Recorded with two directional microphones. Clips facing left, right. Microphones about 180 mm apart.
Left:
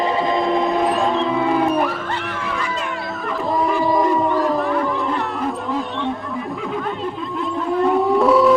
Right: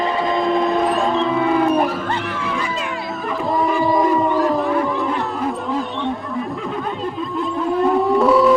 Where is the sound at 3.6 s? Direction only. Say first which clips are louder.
Right 1 dB; centre (ahead or behind).